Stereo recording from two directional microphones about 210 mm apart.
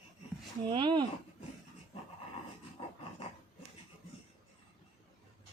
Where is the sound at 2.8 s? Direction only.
25° left (ahead or behind).